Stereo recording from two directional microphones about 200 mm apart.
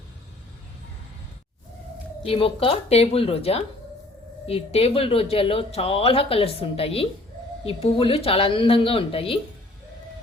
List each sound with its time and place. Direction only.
2.2 s speech: 25° left (ahead or behind)